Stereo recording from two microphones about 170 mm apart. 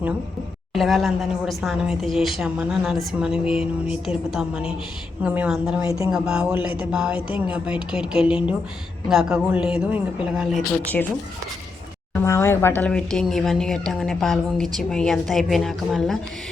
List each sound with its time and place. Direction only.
0.7 s speech: centre (ahead or behind)
5.8 s speech: 20° right (ahead or behind)
6.1 s speech: 5° right (ahead or behind)
12.2 s speech: 15° left (ahead or behind)